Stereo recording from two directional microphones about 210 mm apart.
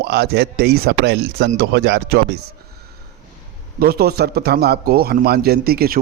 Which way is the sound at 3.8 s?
45° right (ahead or behind).